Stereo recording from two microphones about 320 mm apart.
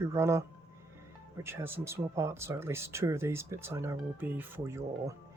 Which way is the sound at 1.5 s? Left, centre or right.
Centre.